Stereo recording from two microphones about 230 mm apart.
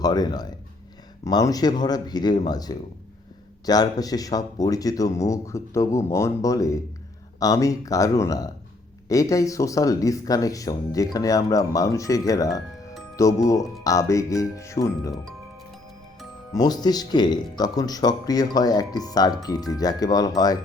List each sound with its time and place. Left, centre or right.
0.0 s speech: centre
15.1 s speech: centre
16.5 s speech: centre